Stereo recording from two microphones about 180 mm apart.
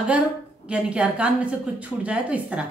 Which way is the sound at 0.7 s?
5° right (ahead or behind).